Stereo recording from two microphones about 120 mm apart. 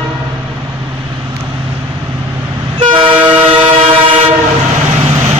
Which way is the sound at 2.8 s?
45° right (ahead or behind).